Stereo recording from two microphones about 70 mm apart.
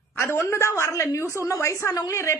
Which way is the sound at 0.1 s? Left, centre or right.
Left.